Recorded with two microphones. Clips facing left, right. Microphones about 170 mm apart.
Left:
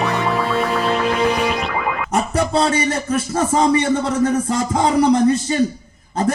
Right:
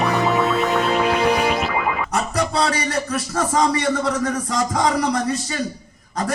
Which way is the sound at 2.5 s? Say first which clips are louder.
Left 4 dB; 25° left (ahead or behind).